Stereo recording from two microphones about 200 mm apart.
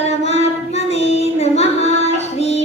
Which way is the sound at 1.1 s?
35° left (ahead or behind).